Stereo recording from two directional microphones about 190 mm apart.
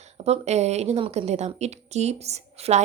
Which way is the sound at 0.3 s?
35° right (ahead or behind).